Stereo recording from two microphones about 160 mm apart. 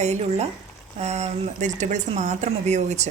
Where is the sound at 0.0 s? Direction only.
45° right (ahead or behind).